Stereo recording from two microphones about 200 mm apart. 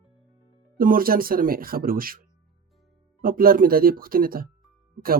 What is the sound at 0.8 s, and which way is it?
Speech, 45° right (ahead or behind).